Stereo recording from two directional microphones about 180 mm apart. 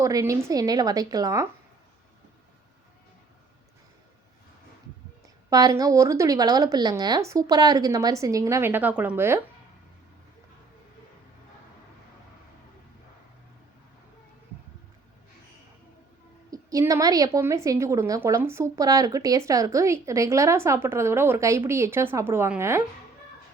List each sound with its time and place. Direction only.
0.0 s a woman's voice: 15° right (ahead or behind)
5.5 s a woman's voice: 20° right (ahead or behind)
16.5 s a woman's voice: 20° right (ahead or behind)